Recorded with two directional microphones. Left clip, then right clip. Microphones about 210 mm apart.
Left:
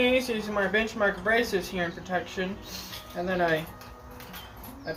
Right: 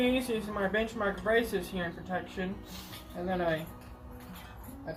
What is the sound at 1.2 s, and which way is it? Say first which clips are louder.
Speech: left 4 dB; 15° left (ahead or behind).